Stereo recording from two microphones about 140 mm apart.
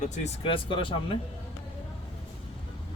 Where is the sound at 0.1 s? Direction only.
45° left (ahead or behind).